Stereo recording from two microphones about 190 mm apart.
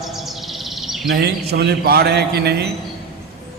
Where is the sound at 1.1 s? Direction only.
60° right (ahead or behind).